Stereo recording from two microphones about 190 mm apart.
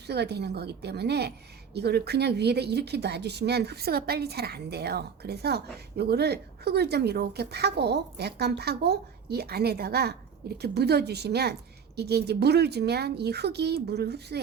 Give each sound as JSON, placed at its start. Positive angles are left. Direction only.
{"t": 0.1, "sound": "speech", "side_deg": -60}